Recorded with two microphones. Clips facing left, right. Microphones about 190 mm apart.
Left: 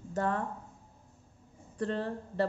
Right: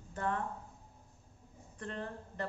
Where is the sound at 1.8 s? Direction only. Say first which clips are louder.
Left 9 dB; 35° left (ahead or behind).